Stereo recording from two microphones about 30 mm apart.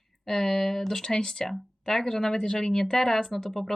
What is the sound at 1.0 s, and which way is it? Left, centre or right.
Speech, left.